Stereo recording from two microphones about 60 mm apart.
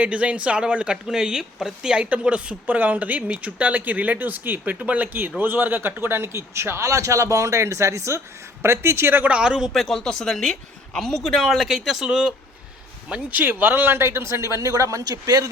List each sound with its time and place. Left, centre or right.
0.0 s speech: right
9.2 s speech: centre
9.8 s speech: centre
13.4 s speech: right